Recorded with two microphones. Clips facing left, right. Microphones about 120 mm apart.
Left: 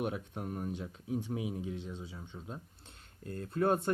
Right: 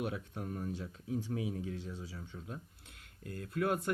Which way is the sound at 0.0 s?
25° left (ahead or behind).